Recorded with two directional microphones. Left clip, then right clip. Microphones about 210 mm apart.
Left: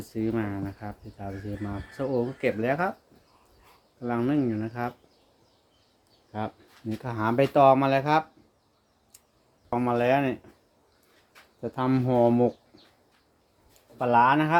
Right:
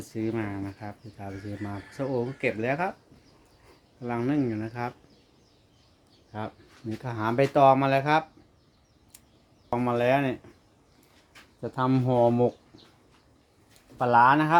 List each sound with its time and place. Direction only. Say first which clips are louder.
0.0 s speech: left 1 dB; centre (ahead or behind)
4.0 s speech: left 1 dB; centre (ahead or behind)
6.3 s speech: left 3 dB; 5° left (ahead or behind)
9.6 s speech: even; 5° right (ahead or behind)
11.6 s speech: even; 5° right (ahead or behind)
14.0 s speech: right 1 dB; 15° right (ahead or behind)